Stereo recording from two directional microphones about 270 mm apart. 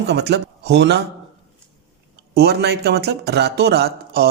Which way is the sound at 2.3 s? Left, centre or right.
Right.